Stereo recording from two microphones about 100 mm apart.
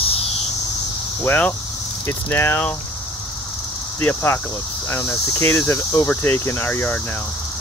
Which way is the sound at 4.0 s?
20° left (ahead or behind).